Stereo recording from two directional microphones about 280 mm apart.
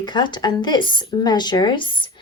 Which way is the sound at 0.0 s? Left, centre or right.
Centre.